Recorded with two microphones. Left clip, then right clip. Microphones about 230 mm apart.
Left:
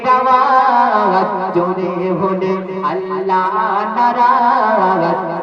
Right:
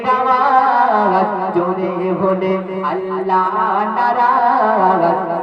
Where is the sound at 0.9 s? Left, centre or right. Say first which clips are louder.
Left 1 dB; left.